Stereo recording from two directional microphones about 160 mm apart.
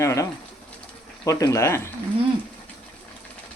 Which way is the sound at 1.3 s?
20° left (ahead or behind).